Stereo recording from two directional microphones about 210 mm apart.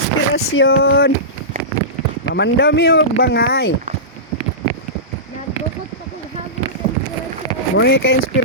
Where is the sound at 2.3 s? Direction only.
55° left (ahead or behind).